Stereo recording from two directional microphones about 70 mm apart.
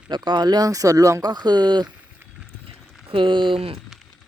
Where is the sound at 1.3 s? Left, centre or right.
Right.